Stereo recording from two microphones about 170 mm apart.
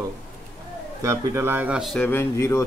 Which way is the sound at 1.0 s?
15° right (ahead or behind).